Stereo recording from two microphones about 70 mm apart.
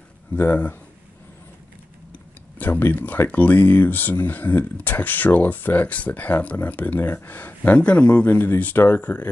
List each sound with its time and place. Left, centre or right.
0.4 s speech: left
2.6 s speech: left